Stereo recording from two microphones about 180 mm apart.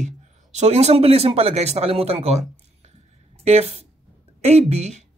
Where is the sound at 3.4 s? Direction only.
35° right (ahead or behind).